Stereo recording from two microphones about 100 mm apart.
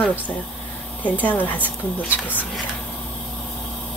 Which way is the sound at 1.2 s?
15° left (ahead or behind).